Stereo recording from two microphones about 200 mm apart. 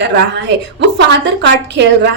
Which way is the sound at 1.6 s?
60° right (ahead or behind).